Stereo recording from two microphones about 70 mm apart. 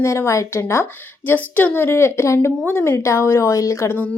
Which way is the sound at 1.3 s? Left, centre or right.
Left.